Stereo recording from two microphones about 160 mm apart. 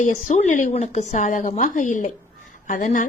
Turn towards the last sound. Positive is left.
turn(degrees=50)  # may be behind; listen again after turning